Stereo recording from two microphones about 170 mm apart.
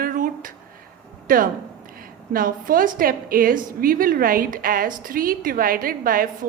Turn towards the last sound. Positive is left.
turn(degrees=-55)  # may be behind; listen again after turning